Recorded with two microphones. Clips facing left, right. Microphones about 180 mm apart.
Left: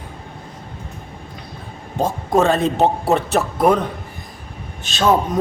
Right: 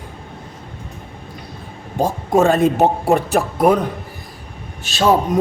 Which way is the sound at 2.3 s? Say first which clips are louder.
Right 2 dB; 10° right (ahead or behind).